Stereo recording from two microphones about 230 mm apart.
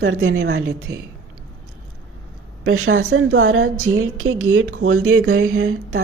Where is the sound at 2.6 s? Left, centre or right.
Right.